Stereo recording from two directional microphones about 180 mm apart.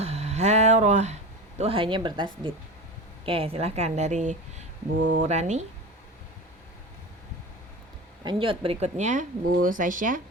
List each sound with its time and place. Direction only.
0.0 s a sound: 35° right (ahead or behind)
1.5 s a woman's voice: 35° right (ahead or behind)
8.2 s speech: 25° right (ahead or behind); by 10.2 s 50° right (ahead or behind)